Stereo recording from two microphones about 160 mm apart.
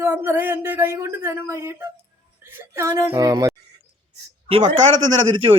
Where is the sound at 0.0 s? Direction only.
15° right (ahead or behind).